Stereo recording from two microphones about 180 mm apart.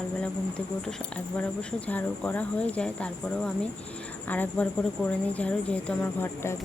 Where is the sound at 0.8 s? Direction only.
5° left (ahead or behind).